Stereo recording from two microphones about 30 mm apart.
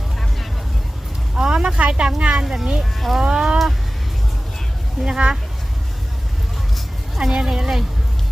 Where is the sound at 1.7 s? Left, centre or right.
Right.